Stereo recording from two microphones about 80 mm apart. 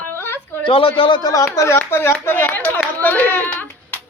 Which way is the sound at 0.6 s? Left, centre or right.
Left.